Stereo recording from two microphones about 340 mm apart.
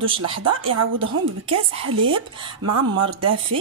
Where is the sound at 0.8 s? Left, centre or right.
Right.